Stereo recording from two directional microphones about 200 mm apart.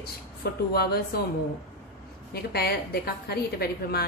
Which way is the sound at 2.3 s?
50° left (ahead or behind).